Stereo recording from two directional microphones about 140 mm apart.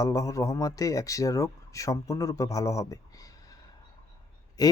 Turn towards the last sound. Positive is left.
turn(degrees=25)  # may be behind; listen again after turning